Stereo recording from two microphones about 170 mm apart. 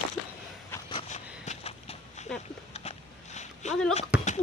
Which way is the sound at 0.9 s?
35° left (ahead or behind).